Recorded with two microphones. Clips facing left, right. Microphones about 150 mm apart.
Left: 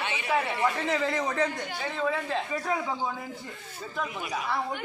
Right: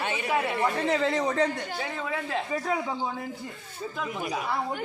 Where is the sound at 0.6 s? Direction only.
30° right (ahead or behind).